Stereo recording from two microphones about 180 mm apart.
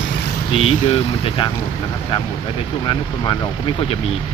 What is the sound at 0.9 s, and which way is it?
Speech, 30° left (ahead or behind).